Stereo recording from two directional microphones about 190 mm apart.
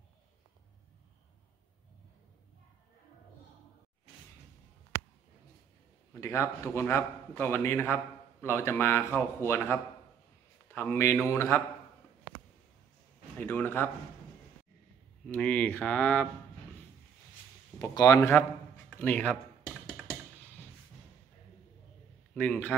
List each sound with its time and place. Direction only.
6.2 s a man's voice: 15° left (ahead or behind)
13.4 s speech: 10° left (ahead or behind)
15.2 s a man's voice: 5° left (ahead or behind)
17.7 s a man's voice: 20° left (ahead or behind)
22.3 s a man's voice: 10° left (ahead or behind)